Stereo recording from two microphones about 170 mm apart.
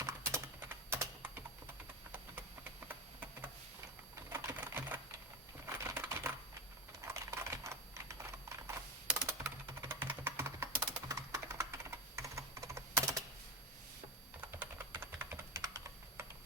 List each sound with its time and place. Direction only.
0.0 s typing: 15° right (ahead or behind)
4.1 s typing: 15° right (ahead or behind)
5.6 s a sound: 15° right (ahead or behind)
7.0 s typing: 15° right (ahead or behind)
11.1 s computer keyboard: 20° right (ahead or behind)
14.6 s computer keyboard: 10° right (ahead or behind)